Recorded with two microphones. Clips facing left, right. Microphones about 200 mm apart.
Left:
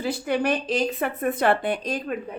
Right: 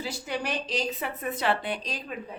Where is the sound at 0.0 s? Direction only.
55° left (ahead or behind).